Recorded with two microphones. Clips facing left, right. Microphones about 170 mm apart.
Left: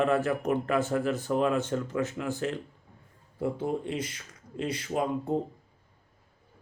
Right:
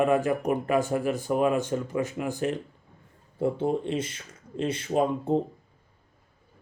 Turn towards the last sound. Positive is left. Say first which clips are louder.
# right 4 dB
turn(degrees=-25)  # may be behind; listen again after turning